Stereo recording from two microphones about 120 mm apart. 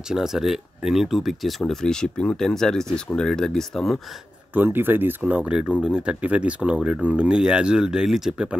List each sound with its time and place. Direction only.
0.1 s speech: 5° right (ahead or behind)
4.6 s speech: 15° right (ahead or behind)